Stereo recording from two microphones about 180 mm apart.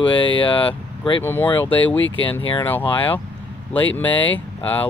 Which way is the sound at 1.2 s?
10° left (ahead or behind).